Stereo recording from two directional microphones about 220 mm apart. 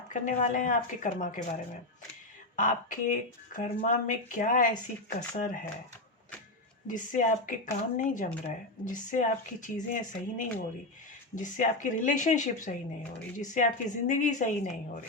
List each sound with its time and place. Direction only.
0.1 s speech: 35° left (ahead or behind)
2.6 s speech: 35° left (ahead or behind)
6.8 s speech: 35° left (ahead or behind)